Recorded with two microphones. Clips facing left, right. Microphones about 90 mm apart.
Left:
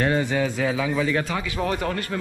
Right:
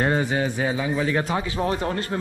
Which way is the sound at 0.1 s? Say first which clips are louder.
Even; 20° right (ahead or behind).